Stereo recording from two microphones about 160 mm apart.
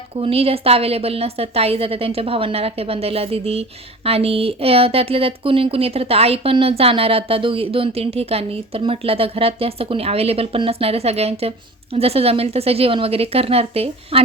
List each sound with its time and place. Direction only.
0.2 s a woman's voice: 35° right (ahead or behind)